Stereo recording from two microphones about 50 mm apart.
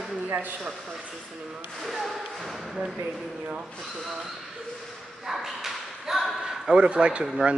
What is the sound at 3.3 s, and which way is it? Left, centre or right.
Speech, right.